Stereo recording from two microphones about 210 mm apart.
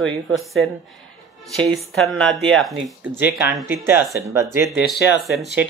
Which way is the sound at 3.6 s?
10° right (ahead or behind).